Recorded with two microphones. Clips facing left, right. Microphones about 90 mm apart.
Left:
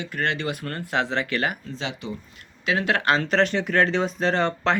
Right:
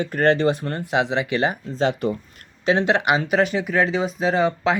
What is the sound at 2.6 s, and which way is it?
Speech, 30° right (ahead or behind).